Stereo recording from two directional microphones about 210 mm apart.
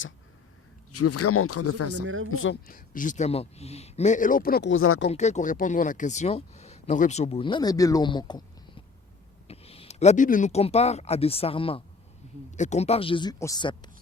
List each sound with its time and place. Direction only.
0.9 s speech: 90° left
2.0 s speech: 70° right (ahead or behind)
2.3 s speech: 70° left (ahead or behind)
2.6 s speech: 40° left (ahead or behind)
4.7 s speech: 80° left
5.0 s speech: 35° left (ahead or behind)